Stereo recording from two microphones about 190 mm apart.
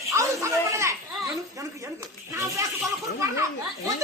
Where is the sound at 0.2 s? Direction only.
15° right (ahead or behind).